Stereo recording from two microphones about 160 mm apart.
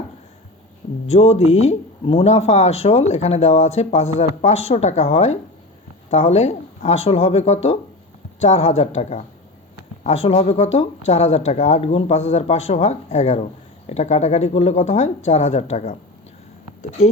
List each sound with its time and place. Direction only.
1.0 s speech: 40° left (ahead or behind)
11.8 s speech: 40° left (ahead or behind)